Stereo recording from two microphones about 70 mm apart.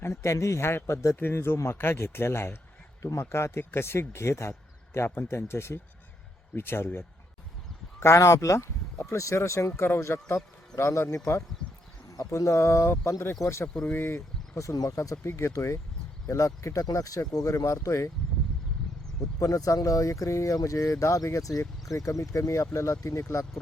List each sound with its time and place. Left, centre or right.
0.0 s speech: left
7.9 s speech: left
19.4 s speech: left